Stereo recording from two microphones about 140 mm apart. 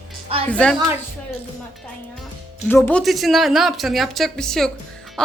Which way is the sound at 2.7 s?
15° left (ahead or behind).